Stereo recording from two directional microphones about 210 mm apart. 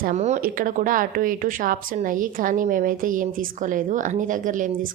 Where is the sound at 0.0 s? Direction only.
35° right (ahead or behind).